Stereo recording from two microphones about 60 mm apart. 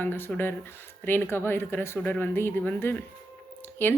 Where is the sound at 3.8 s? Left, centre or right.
Left.